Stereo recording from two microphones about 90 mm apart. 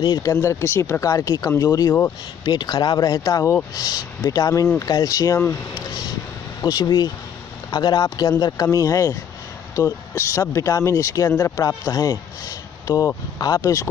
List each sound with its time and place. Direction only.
0.0 s speech: 50° left (ahead or behind)
0.3 s speech: 30° left (ahead or behind)
2.4 s speech: 50° left (ahead or behind)
6.6 s speech: 50° left (ahead or behind); by 11.6 s 30° left (ahead or behind)
11.8 s speech: 40° left (ahead or behind)